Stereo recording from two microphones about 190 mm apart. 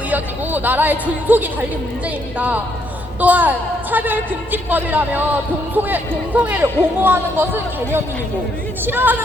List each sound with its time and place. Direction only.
0.1 s speech: 10° right (ahead or behind)
3.2 s speech: 10° right (ahead or behind)